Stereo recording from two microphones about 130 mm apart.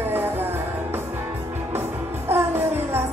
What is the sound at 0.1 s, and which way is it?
Music, 15° right (ahead or behind).